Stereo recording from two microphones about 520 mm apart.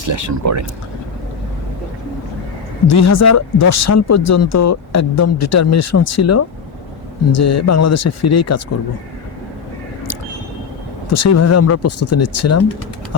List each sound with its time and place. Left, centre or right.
0.0 s speech: right
2.8 s speech: left
11.1 s speech: left